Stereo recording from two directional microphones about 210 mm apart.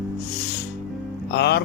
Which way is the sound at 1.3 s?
50° left (ahead or behind).